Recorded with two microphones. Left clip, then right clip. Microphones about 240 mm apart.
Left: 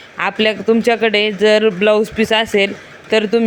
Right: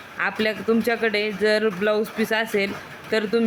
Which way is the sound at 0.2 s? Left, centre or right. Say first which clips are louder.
Left 7 dB; centre.